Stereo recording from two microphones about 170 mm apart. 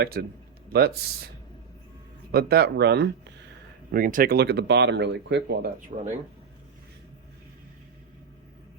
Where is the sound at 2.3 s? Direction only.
65° right (ahead or behind); by 3.1 s 85° right.